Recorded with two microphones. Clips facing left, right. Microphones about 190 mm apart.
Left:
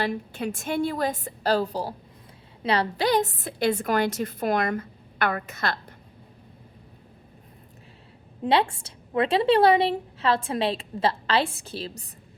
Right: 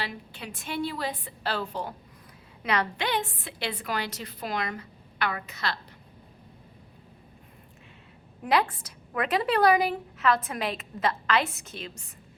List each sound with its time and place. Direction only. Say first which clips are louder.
0.0 s a woman's voice: left 9 dB; 45° left (ahead or behind)
8.4 s a woman's voice: left 3 dB; 30° left (ahead or behind)